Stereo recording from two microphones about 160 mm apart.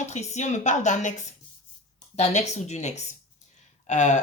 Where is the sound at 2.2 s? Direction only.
45° left (ahead or behind).